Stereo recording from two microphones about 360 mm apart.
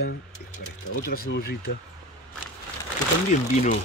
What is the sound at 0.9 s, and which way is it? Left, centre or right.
Speech, left.